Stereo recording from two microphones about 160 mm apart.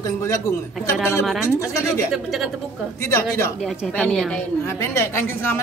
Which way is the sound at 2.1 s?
Centre (ahead or behind).